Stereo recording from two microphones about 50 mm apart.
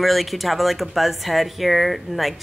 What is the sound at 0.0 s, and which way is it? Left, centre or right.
Speech, centre.